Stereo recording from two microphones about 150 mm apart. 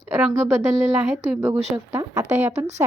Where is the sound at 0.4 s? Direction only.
20° right (ahead or behind).